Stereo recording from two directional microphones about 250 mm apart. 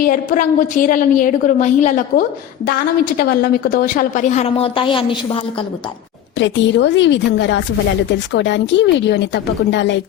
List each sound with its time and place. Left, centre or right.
0.0 s a woman's voice: left
6.4 s a woman's voice: left